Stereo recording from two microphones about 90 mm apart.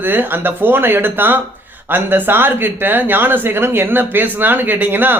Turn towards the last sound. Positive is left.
turn(degrees=-20)  # may be behind; listen again after turning